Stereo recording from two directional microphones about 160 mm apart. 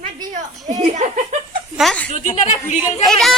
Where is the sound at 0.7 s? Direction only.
45° right (ahead or behind).